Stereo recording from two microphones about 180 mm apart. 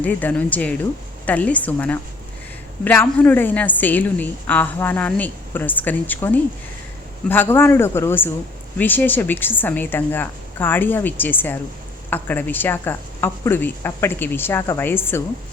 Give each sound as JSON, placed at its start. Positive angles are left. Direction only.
{"t": 0.0, "sound": "a woman's voice", "side_deg": 10}